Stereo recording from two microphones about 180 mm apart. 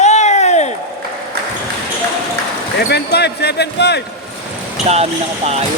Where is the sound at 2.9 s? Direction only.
65° left (ahead or behind).